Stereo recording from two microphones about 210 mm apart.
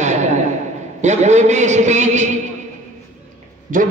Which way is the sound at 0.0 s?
35° right (ahead or behind).